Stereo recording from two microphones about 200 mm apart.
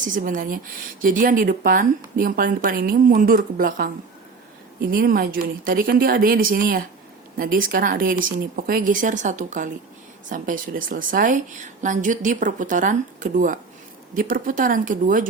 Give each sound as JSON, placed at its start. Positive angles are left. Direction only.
{"t": 0.0, "sound": "a woman's voice", "side_deg": -40}